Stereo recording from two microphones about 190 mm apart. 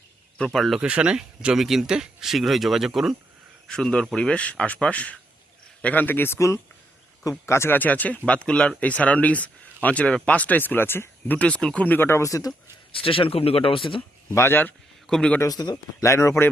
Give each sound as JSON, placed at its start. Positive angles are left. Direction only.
{"t": 0.3, "sound": "speech", "side_deg": 0}
{"t": 14.3, "sound": "a man's voice", "side_deg": 10}
{"t": 15.4, "sound": "speech", "side_deg": 20}